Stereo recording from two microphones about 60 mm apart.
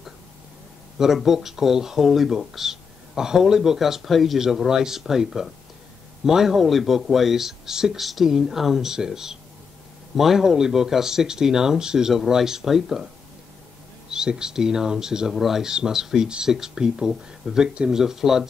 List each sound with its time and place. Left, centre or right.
0.9 s speech: centre
14.1 s speech: centre